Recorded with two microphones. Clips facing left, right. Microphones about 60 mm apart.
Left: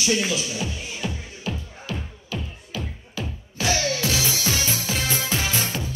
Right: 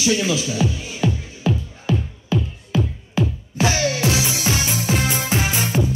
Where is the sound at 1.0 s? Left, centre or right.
Right.